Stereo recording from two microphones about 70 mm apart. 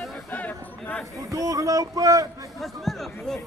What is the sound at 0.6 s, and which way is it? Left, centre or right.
Chatter, left.